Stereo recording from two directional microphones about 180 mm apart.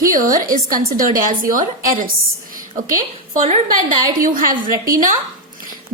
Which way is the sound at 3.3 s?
40° right (ahead or behind).